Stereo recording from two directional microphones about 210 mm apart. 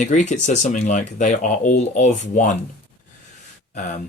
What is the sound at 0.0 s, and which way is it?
Speech, 35° left (ahead or behind).